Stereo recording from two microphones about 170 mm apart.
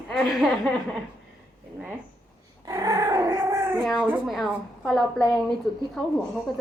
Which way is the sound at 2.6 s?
20° right (ahead or behind).